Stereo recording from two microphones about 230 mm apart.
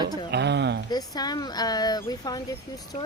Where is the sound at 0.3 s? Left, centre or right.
Right.